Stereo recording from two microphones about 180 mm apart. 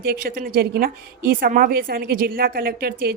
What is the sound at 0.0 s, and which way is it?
A woman's voice, 55° right (ahead or behind).